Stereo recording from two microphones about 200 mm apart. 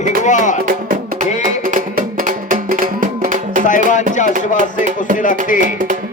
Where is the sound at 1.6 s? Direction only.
45° right (ahead or behind).